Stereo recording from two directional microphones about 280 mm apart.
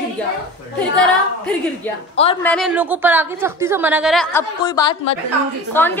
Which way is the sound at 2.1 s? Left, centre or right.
Left.